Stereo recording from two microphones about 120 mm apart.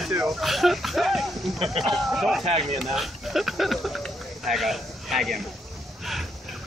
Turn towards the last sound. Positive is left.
turn(degrees=0)  # may be behind; listen again after turning